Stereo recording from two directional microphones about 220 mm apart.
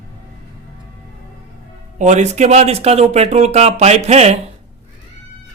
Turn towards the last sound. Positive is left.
turn(degrees=-30)  # may be behind; listen again after turning